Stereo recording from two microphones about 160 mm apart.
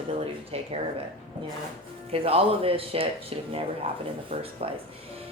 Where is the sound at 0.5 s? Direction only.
40° right (ahead or behind).